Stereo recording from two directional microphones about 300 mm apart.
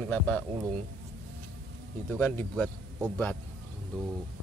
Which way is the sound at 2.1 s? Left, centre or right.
Centre.